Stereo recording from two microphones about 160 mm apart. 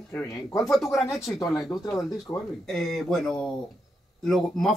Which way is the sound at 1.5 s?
25° left (ahead or behind).